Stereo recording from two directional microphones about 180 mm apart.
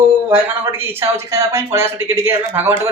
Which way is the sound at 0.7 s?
10° right (ahead or behind).